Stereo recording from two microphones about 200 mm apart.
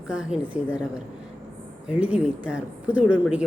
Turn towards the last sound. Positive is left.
turn(degrees=-5)  # may be behind; listen again after turning